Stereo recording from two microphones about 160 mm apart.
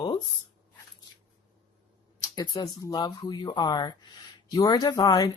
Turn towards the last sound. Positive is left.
turn(degrees=20)  # may be behind; listen again after turning